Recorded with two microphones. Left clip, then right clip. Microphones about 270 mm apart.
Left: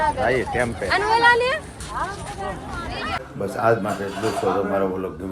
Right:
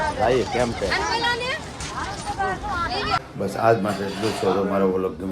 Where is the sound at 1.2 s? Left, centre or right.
Centre.